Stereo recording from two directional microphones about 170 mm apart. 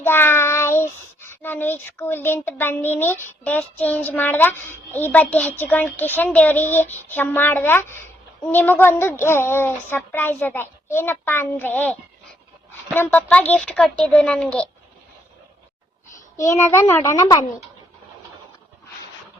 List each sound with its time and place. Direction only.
0.0 s child singing: 15° left (ahead or behind)
3.2 s a child's voice: 10° left (ahead or behind)
16.4 s a child's voice: 20° left (ahead or behind)